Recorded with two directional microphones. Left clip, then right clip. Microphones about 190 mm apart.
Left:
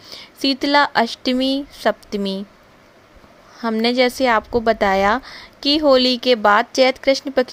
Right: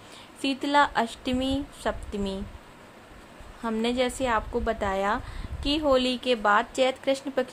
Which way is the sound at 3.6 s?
35° left (ahead or behind).